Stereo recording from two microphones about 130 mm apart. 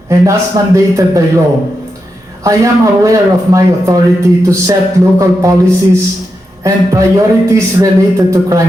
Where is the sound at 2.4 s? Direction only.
25° right (ahead or behind).